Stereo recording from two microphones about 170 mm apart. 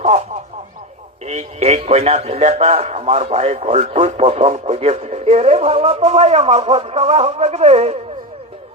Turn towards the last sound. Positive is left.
turn(degrees=-40)  # may be behind; listen again after turning